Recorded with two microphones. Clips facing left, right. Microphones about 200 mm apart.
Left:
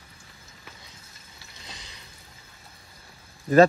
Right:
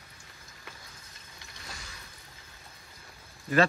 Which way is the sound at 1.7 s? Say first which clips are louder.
Even; 20° left (ahead or behind).